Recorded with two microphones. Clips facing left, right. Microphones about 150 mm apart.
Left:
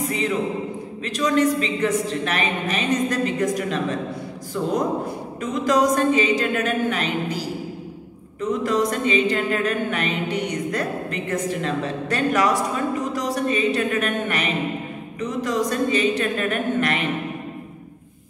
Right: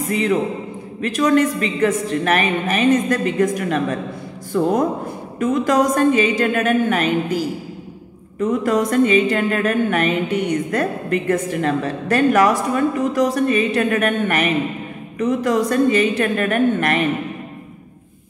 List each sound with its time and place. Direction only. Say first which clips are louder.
1.0 s a woman's voice: right 4 dB; 55° right (ahead or behind)
5.4 s a sound: right 3 dB; 50° right (ahead or behind)
15.1 s a woman's voice: right 6 dB; 55° right (ahead or behind)